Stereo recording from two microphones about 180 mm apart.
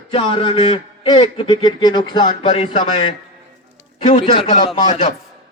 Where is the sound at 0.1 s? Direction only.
30° left (ahead or behind).